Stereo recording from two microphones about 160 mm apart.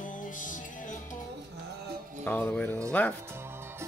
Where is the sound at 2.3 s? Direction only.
10° left (ahead or behind).